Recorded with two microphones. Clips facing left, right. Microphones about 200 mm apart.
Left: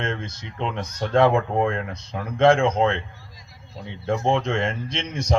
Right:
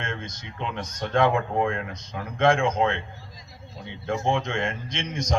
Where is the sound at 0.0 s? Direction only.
25° left (ahead or behind).